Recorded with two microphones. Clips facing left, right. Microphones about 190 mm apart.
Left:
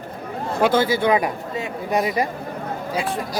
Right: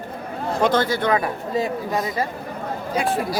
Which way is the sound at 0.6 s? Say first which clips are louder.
Left 2 dB; 5° left (ahead or behind).